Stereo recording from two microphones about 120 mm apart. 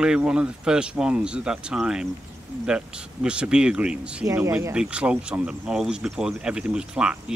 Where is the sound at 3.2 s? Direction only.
10° right (ahead or behind).